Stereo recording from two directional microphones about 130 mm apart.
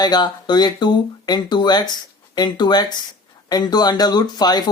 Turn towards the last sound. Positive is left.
turn(degrees=30)  # may be behind; listen again after turning